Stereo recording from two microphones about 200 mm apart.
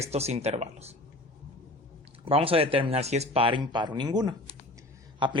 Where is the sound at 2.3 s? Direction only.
25° right (ahead or behind).